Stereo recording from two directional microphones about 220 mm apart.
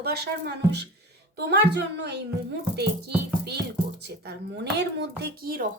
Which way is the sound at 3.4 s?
50° right (ahead or behind).